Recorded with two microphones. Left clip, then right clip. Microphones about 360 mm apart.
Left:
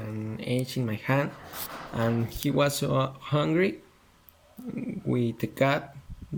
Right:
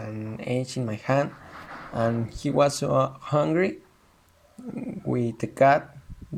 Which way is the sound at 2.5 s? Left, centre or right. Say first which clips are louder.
Right 5 dB; centre.